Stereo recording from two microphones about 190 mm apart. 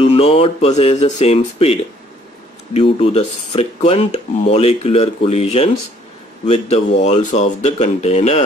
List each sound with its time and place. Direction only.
0.0 s speech: 30° left (ahead or behind)